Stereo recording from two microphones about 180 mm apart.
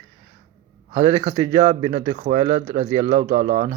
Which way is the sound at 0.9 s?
30° right (ahead or behind).